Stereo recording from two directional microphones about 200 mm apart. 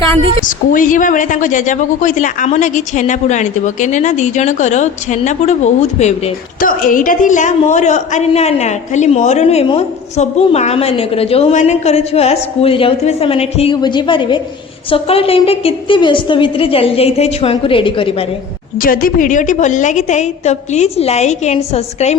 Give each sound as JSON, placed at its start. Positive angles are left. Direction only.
{"t": 0.2, "sound": "a woman's voice", "side_deg": -25}
{"t": 0.4, "sound": "a woman's voice", "side_deg": 40}
{"t": 18.8, "sound": "a woman's voice", "side_deg": 45}